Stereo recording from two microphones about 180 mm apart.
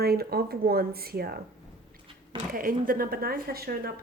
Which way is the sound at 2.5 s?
50° right (ahead or behind).